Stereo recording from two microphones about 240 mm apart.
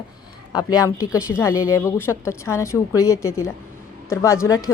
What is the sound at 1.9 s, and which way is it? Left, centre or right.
Speech, centre.